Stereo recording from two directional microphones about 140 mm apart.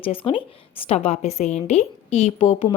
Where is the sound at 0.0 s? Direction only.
40° left (ahead or behind).